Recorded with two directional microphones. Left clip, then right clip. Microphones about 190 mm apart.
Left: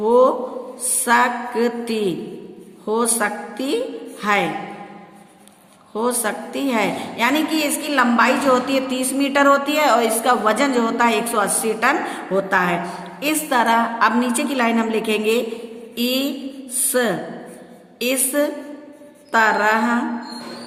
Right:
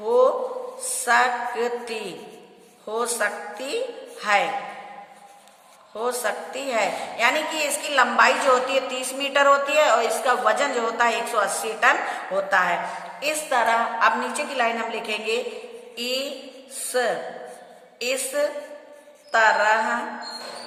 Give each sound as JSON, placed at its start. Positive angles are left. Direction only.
{"t": 0.0, "sound": "a man's voice", "side_deg": 30}
{"t": 6.0, "sound": "a woman's voice", "side_deg": 30}
{"t": 16.0, "sound": "music", "side_deg": 35}